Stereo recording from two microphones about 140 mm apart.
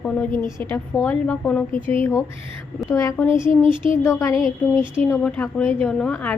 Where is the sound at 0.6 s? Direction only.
15° left (ahead or behind).